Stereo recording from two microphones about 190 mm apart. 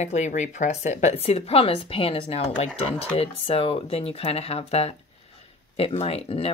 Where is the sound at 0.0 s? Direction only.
35° left (ahead or behind).